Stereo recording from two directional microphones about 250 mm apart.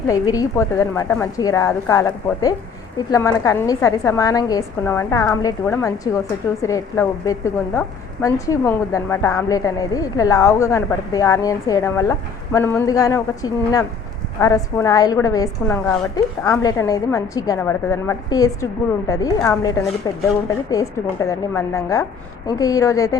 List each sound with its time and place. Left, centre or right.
0.1 s a woman's voice: centre